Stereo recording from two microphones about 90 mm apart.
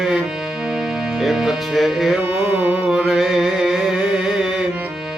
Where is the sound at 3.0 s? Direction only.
5° right (ahead or behind).